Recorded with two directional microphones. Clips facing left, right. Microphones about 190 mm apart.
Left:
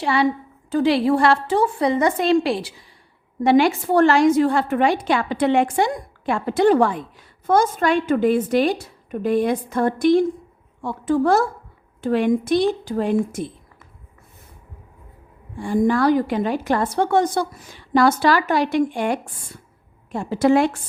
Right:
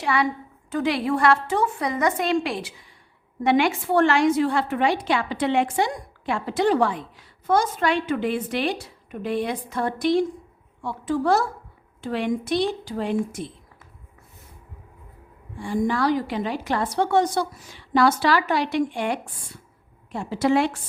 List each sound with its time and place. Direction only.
0.0 s a woman's voice: 30° left (ahead or behind); by 13.5 s 50° left (ahead or behind)
15.6 s a woman's voice: 50° left (ahead or behind)